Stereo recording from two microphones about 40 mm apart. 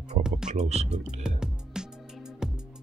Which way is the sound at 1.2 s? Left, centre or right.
Centre.